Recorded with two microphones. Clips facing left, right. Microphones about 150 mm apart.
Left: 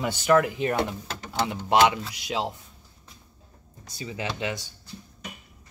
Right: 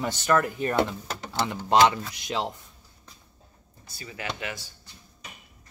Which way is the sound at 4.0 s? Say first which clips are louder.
Left 4 dB; 20° left (ahead or behind).